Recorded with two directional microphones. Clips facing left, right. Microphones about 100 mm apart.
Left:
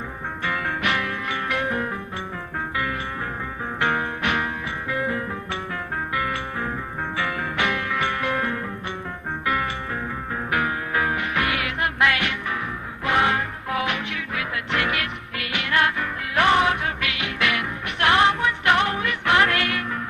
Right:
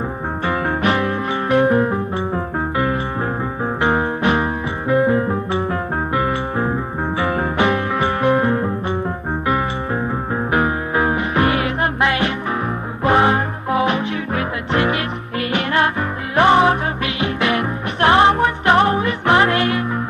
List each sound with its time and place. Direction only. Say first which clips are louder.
0.4 s music: right 7 dB; 35° right (ahead or behind)